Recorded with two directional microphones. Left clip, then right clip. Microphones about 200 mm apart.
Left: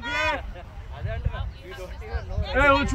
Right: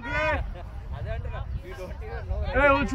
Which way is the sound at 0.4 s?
40° right (ahead or behind).